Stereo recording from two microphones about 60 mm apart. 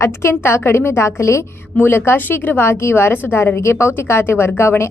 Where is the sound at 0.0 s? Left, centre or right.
Left.